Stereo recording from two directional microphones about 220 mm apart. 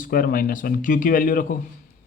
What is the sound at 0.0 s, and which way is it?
Speech, 40° left (ahead or behind).